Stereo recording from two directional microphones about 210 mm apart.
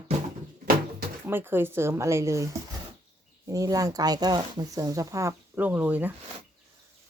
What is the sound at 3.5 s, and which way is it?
Speech, 15° right (ahead or behind).